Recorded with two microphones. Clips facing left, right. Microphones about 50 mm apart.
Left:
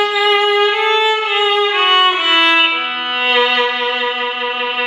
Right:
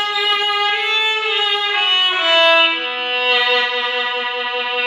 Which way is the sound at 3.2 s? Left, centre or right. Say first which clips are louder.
Left 3 dB; left.